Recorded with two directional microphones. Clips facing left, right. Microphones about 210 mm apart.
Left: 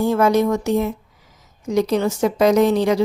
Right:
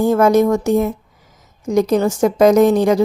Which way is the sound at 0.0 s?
45° right (ahead or behind).